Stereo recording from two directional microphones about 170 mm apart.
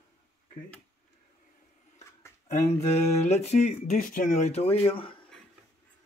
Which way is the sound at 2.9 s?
40° left (ahead or behind).